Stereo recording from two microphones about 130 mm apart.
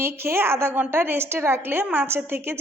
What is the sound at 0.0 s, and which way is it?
A woman's voice, 20° right (ahead or behind).